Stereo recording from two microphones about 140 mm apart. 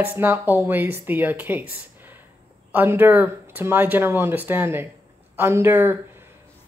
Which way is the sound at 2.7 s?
15° right (ahead or behind).